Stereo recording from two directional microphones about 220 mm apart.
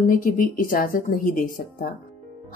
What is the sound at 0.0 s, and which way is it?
A woman's voice, 40° left (ahead or behind).